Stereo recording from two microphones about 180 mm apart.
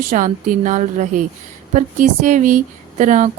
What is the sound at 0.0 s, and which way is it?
Speech, 45° right (ahead or behind).